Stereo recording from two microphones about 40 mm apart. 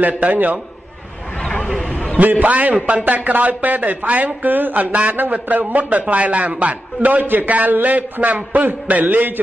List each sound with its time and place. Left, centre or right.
0.0 s speech: right
1.9 s a sound: left
2.1 s speech: right